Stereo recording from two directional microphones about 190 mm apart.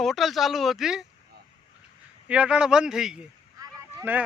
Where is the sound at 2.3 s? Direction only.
5° right (ahead or behind).